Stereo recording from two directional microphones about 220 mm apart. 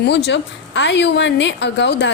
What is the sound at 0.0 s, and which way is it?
A woman's voice, 50° left (ahead or behind).